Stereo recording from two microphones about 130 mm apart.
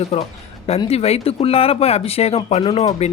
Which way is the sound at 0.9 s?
50° left (ahead or behind).